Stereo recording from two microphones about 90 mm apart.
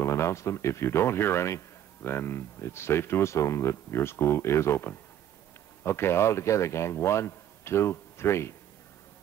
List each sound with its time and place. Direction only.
0.0 s speech: 30° left (ahead or behind)